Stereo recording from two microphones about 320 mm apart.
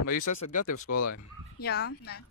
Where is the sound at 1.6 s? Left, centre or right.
Left.